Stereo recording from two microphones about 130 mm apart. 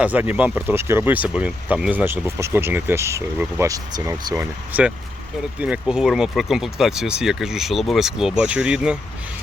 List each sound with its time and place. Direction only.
0.0 s speech: 10° right (ahead or behind)
4.7 s speech: 10° right (ahead or behind)